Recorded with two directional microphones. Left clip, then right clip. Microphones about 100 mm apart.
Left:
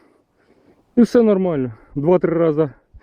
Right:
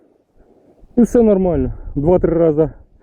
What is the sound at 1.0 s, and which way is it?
Speech, 20° left (ahead or behind).